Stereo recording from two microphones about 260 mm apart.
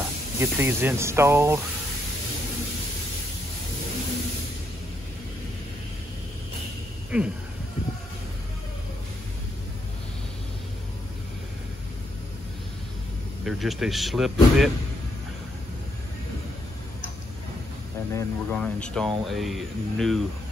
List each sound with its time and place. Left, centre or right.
0.4 s speech: centre
7.1 s speech: centre
13.5 s speech: centre
18.1 s speech: centre